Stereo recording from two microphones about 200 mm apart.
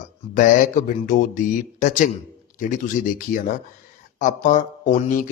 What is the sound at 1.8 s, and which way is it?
A man's voice, 40° left (ahead or behind).